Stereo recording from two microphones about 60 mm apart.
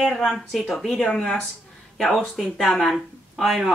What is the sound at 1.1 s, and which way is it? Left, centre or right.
Speech, centre.